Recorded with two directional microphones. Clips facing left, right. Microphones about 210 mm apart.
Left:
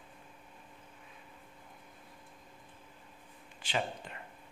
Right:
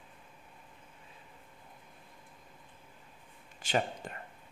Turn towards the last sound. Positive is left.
turn(degrees=-45)  # may be behind; listen again after turning